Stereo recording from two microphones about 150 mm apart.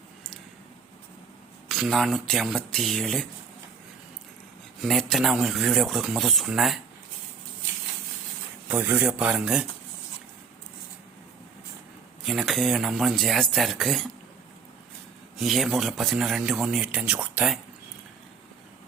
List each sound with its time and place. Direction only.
1.6 s a man's voice: 5° left (ahead or behind)
4.8 s a man's voice: centre (ahead or behind)
8.7 s speech: 10° right (ahead or behind)
12.2 s a man's voice: centre (ahead or behind)
15.4 s a man's voice: centre (ahead or behind)